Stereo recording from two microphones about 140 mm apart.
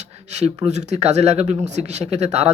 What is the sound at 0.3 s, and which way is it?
Speech, 50° right (ahead or behind).